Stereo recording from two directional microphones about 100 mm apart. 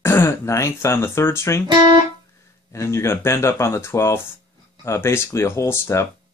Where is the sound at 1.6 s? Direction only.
45° right (ahead or behind).